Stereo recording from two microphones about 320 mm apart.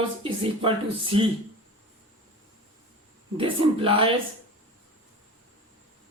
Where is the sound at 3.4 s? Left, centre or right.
Centre.